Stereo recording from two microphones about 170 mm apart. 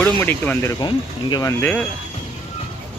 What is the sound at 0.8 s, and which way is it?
Speech, 25° left (ahead or behind).